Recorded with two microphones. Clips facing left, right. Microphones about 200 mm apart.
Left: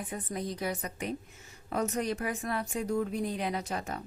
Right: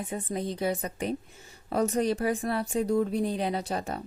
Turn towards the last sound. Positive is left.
turn(degrees=-30)  # may be behind; listen again after turning